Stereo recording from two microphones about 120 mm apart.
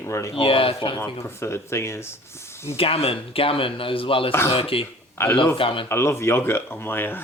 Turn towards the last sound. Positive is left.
turn(degrees=20)  # may be behind; listen again after turning